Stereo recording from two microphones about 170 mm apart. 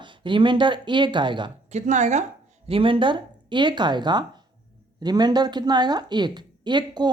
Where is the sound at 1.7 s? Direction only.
45° right (ahead or behind).